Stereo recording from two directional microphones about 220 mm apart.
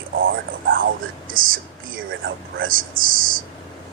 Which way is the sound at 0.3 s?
60° right (ahead or behind).